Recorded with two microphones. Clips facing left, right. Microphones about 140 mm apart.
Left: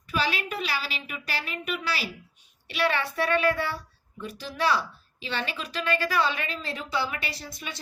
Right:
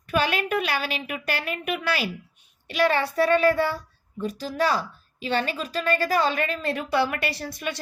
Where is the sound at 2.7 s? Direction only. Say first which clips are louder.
Right 5 dB; 40° right (ahead or behind).